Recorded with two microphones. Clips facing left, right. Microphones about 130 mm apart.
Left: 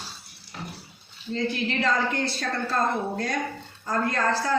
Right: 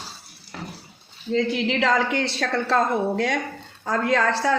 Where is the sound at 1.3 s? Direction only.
75° right (ahead or behind).